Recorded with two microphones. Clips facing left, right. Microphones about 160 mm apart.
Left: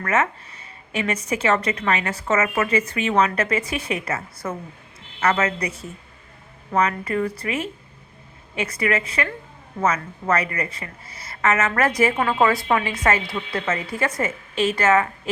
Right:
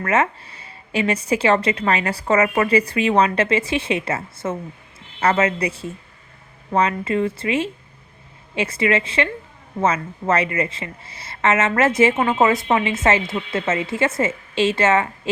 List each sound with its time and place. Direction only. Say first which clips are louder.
0.0 s speech: right 2 dB; 30° right (ahead or behind)